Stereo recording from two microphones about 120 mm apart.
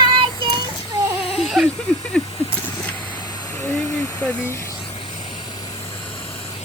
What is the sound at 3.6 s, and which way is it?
Vehicle, 15° left (ahead or behind).